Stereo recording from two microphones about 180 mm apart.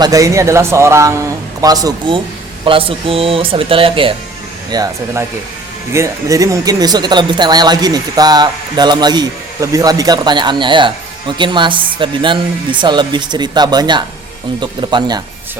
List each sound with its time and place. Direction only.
0.0 s a man's voice: 20° right (ahead or behind)